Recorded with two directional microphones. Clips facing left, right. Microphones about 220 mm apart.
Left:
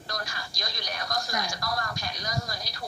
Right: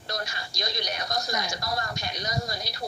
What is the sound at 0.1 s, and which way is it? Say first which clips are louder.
Speech: right 3 dB; 25° right (ahead or behind).